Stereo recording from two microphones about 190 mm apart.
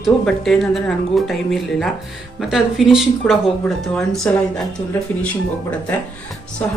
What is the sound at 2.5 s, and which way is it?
Speech, centre (ahead or behind).